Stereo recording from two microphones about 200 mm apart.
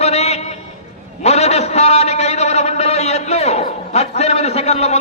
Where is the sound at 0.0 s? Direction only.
30° left (ahead or behind).